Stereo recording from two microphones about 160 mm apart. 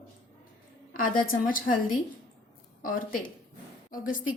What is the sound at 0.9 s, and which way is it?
Speech, 60° left (ahead or behind).